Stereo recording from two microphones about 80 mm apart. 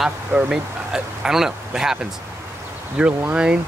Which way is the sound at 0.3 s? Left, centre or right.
Centre.